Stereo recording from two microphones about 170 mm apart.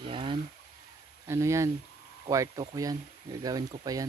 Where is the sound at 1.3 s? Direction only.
15° right (ahead or behind).